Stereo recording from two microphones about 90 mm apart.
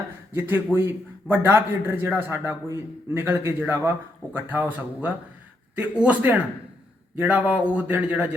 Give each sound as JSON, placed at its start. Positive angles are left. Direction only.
{"t": 0.3, "sound": "a man's voice", "side_deg": -20}
{"t": 3.2, "sound": "a man's voice", "side_deg": -20}